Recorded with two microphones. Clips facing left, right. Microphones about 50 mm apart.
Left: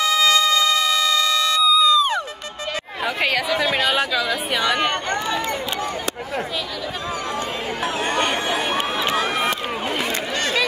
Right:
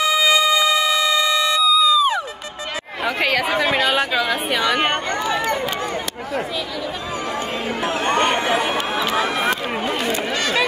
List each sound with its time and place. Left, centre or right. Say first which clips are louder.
0.0 s wind instrument: right 1 dB; centre
1.6 s a sound: even; centre
3.2 s speech: right 2 dB; centre
3.4 s speech: right 2 dB; right
7.8 s speech: right 3 dB; right